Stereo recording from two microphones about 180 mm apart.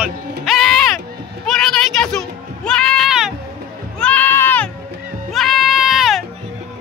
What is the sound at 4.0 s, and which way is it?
Sheep, 10° left (ahead or behind).